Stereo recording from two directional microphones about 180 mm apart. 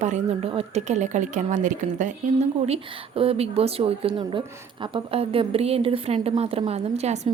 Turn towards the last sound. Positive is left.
turn(degrees=-35)  # may be behind; listen again after turning